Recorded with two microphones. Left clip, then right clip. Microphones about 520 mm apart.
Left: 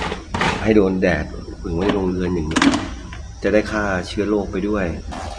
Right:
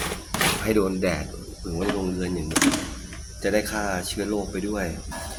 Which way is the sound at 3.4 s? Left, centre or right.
Right.